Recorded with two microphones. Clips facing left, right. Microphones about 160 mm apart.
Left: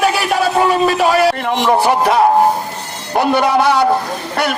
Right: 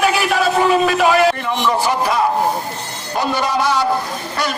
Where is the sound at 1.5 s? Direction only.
60° left (ahead or behind).